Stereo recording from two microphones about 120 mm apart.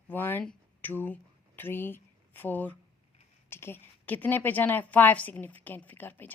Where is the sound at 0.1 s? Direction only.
15° left (ahead or behind).